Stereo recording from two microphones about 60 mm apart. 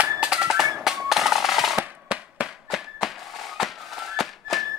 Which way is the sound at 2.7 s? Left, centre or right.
Centre.